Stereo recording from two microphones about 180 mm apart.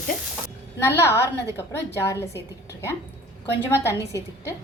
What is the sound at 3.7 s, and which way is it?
Speech, 15° left (ahead or behind).